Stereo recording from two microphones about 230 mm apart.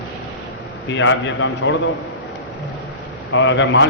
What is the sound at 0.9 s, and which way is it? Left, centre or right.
Speech, left.